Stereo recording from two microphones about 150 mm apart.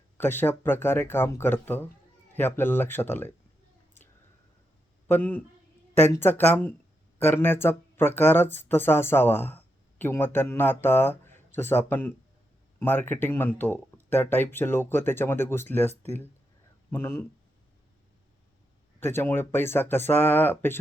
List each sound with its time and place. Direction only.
0.2 s speech: 15° left (ahead or behind)
5.0 s speech: 15° left (ahead or behind)
16.9 s speech: 15° left (ahead or behind)
18.9 s speech: 15° left (ahead or behind)